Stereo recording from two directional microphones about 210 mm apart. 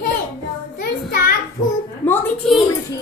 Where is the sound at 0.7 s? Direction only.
45° left (ahead or behind).